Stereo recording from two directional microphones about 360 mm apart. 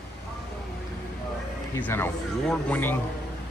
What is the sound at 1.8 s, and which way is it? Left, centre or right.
Speech, centre.